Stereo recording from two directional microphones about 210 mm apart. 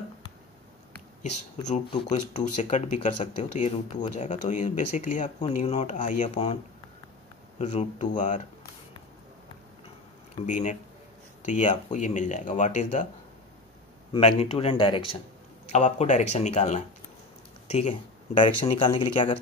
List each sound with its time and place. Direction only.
2.3 s speech: 35° left (ahead or behind)
10.4 s speech: 35° left (ahead or behind)
14.1 s speech: 25° left (ahead or behind)